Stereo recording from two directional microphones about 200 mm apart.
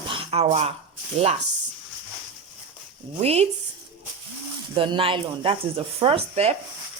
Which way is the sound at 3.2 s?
30° right (ahead or behind).